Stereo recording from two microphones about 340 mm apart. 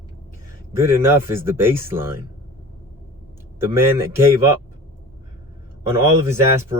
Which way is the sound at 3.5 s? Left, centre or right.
Centre.